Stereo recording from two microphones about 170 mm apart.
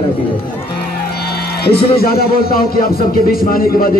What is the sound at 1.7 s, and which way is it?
Speech, 65° left (ahead or behind).